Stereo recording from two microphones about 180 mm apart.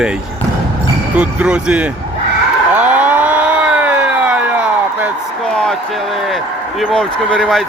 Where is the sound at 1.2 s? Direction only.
5° right (ahead or behind).